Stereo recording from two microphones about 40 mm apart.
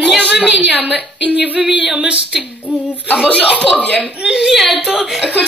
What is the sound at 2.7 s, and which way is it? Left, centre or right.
Speech, right.